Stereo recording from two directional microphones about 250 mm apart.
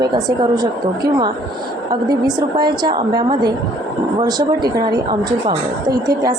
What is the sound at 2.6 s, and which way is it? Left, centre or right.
Speech, centre.